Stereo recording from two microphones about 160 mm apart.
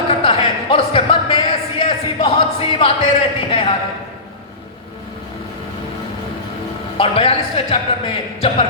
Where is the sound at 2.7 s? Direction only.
35° left (ahead or behind).